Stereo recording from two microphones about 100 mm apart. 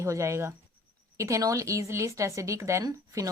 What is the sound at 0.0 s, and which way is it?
Speech, 30° right (ahead or behind).